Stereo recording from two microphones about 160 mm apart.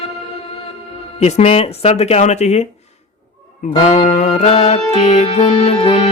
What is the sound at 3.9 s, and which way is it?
Music, 45° left (ahead or behind).